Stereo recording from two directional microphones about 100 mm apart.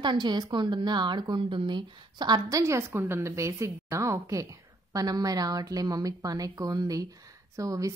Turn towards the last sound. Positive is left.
turn(degrees=-35)  # may be behind; listen again after turning